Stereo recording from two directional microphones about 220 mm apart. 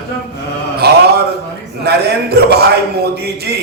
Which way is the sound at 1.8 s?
45° right (ahead or behind).